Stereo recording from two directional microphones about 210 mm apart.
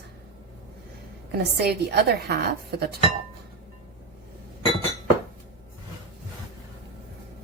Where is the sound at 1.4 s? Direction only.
50° right (ahead or behind).